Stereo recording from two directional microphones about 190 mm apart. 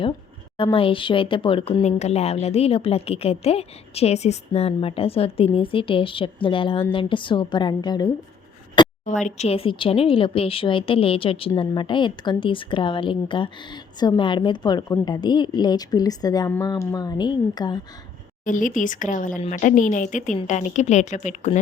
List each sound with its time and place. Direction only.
0.5 s speech: 25° left (ahead or behind)
9.0 s speech: 40° left (ahead or behind); by 17.7 s 20° left (ahead or behind)
18.4 s speech: 45° left (ahead or behind)